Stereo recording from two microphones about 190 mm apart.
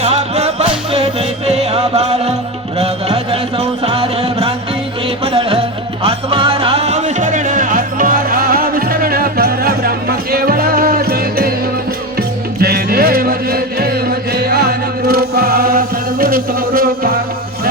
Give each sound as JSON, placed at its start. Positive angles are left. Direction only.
{"t": 0.0, "sound": "music", "side_deg": -30}
{"t": 12.5, "sound": "music", "side_deg": -55}